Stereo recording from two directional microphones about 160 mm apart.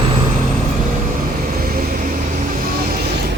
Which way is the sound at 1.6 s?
60° right (ahead or behind).